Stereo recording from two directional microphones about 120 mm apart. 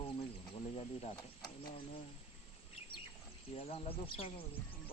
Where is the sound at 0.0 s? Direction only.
50° left (ahead or behind).